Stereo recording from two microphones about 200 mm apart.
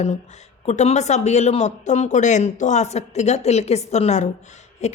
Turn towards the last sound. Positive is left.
turn(degrees=35)  # may be behind; listen again after turning